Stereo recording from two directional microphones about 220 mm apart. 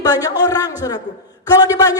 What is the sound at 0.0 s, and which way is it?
A woman's voice, 15° left (ahead or behind).